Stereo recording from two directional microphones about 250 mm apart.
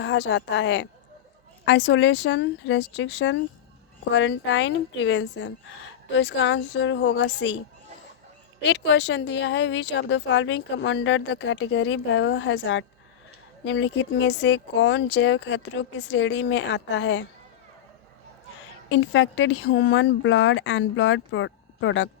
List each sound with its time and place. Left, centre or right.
0.0 s speech: left
8.6 s speech: left
18.9 s speech: left